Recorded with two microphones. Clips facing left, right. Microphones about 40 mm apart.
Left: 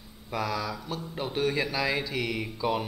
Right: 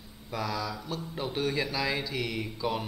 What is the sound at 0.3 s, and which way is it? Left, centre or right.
A man's voice, centre.